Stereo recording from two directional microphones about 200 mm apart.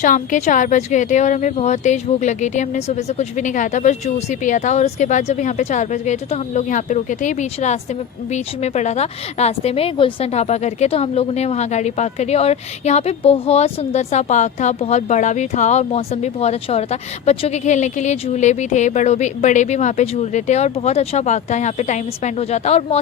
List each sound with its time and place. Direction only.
0.0 s speech: 40° left (ahead or behind)